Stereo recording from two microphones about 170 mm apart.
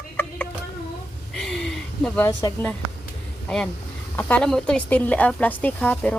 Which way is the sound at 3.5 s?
5° left (ahead or behind).